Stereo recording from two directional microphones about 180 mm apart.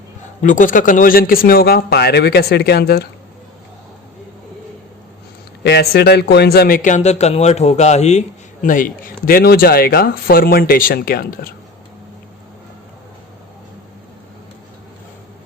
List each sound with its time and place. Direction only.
0.4 s speech: 45° left (ahead or behind)
5.6 s speech: 65° left (ahead or behind); by 8.2 s 40° left (ahead or behind)
8.6 s speech: 50° left (ahead or behind)